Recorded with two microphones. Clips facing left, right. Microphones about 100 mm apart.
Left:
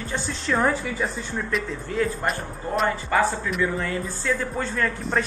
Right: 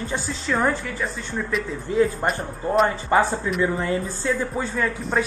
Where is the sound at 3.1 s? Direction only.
25° right (ahead or behind).